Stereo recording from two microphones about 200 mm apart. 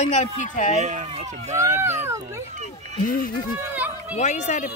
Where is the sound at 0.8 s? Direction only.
35° right (ahead or behind).